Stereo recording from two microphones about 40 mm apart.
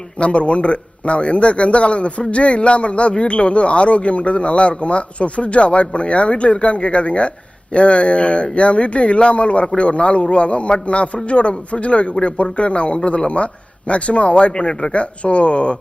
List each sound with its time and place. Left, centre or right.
0.2 s a man's voice: left
15.2 s speech: left